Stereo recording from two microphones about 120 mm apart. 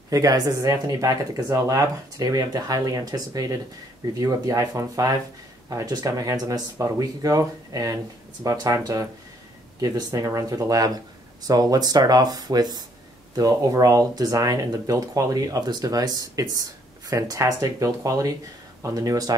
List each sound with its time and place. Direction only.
0.1 s speech: 30° right (ahead or behind)